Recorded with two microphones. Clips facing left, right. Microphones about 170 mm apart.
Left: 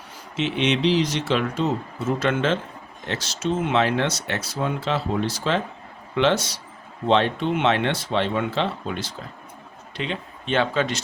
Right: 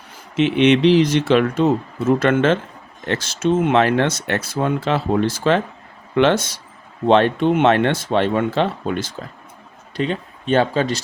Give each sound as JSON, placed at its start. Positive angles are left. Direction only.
{"t": 0.3, "sound": "speech", "side_deg": -55}